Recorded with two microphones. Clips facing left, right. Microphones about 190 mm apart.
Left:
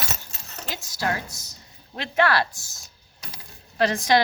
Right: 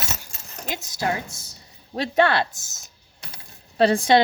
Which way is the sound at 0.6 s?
20° right (ahead or behind).